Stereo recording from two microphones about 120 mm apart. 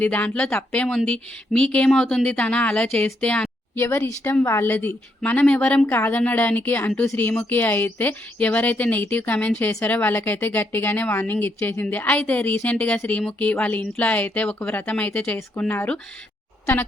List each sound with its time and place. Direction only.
0.0 s speech: 15° left (ahead or behind)